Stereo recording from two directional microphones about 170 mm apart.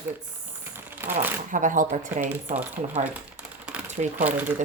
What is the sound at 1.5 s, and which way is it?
Speech, 50° right (ahead or behind).